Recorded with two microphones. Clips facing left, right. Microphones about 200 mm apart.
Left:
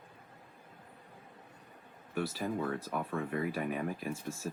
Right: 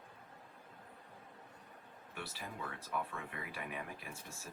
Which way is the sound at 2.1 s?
40° left (ahead or behind).